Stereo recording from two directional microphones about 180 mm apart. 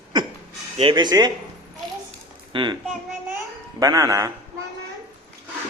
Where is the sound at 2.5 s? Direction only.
25° right (ahead or behind).